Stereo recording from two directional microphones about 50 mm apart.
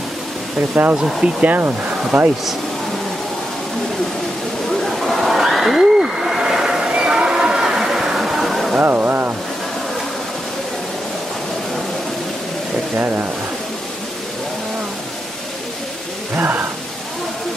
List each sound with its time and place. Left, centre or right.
0.6 s speech: right
0.9 s speech: centre
1.4 s speech: right
2.1 s speech: centre
4.8 s a sound: centre
8.7 s speech: right
12.9 s speech: right
16.3 s speech: right